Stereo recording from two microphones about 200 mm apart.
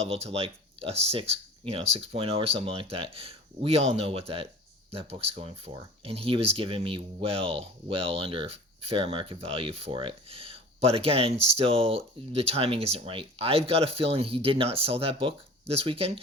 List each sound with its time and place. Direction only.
0.0 s speech: 30° right (ahead or behind)